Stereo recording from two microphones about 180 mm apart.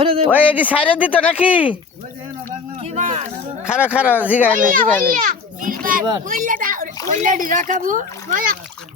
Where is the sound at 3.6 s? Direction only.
5° right (ahead or behind).